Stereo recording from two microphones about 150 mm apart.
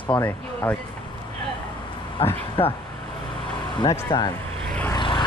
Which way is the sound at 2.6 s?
35° left (ahead or behind).